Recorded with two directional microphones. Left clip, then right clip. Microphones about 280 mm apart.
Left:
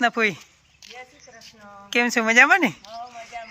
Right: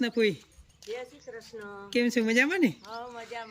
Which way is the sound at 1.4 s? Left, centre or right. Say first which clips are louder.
Right 3 dB; right.